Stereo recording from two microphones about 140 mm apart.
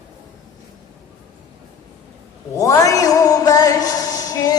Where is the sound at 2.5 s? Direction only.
25° left (ahead or behind).